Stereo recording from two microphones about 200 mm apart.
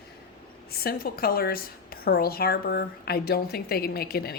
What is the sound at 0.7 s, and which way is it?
A woman's voice, 50° left (ahead or behind).